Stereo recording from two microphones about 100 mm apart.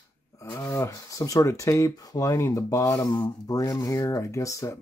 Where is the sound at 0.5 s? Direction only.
30° left (ahead or behind).